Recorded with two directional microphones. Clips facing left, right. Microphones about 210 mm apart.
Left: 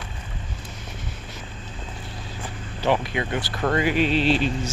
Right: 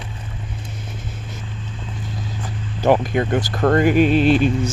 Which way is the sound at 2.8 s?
45° right (ahead or behind).